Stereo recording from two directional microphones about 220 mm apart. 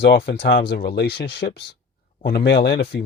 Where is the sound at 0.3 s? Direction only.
50° left (ahead or behind).